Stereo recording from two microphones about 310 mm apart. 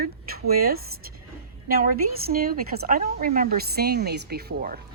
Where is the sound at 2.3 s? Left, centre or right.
Right.